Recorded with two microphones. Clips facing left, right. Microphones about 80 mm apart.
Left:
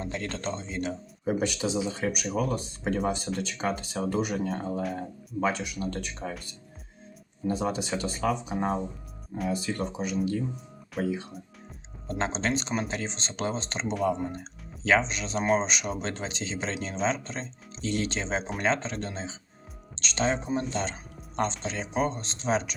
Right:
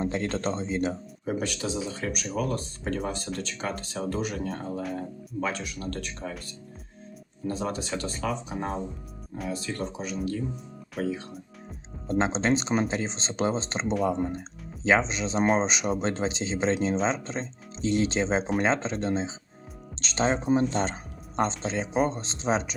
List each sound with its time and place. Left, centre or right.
0.0 s speech: right
1.2 s speech: centre
4.4 s speech: centre
4.9 s speech: centre
7.4 s speech: centre
12.1 s speech: right
14.2 s speech: centre
14.8 s speech: right
21.6 s speech: right